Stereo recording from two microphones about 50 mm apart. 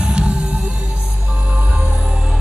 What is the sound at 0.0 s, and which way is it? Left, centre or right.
Music, right.